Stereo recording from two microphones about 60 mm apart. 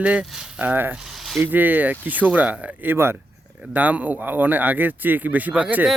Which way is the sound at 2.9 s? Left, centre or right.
Right.